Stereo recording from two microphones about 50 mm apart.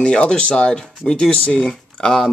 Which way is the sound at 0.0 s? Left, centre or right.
Centre.